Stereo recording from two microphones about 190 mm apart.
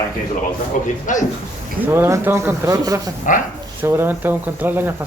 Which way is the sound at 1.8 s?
10° right (ahead or behind).